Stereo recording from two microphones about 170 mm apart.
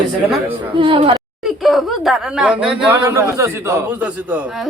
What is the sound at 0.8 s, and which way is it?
Speech, 30° right (ahead or behind).